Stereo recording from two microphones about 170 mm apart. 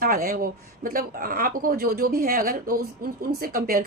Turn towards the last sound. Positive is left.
turn(degrees=-55)  # may be behind; listen again after turning